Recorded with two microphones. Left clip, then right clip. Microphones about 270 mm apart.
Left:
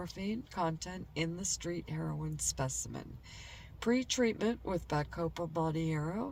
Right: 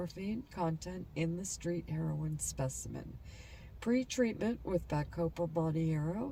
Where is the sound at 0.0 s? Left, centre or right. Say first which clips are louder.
Left 1 dB; centre.